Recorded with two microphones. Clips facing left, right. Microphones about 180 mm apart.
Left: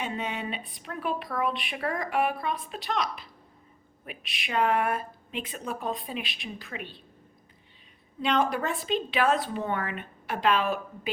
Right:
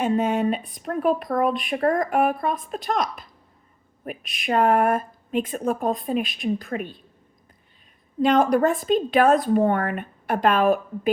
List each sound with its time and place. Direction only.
0.0 s speech: 45° right (ahead or behind)
8.2 s speech: 45° right (ahead or behind)